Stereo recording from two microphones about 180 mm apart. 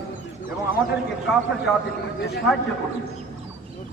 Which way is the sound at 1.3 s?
Centre (ahead or behind).